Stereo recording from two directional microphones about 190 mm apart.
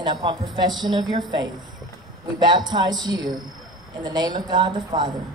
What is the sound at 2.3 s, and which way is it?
A woman's voice, 20° right (ahead or behind).